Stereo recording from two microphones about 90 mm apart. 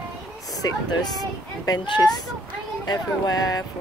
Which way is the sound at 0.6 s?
45° left (ahead or behind).